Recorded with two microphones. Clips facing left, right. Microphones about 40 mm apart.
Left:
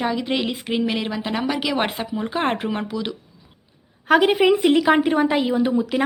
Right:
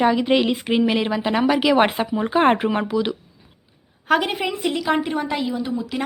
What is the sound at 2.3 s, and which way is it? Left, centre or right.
Speech, right.